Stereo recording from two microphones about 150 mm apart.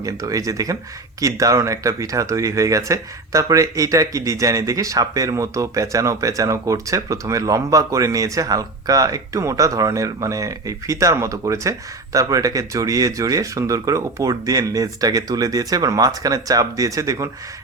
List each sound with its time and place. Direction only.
0.0 s speech: 20° right (ahead or behind)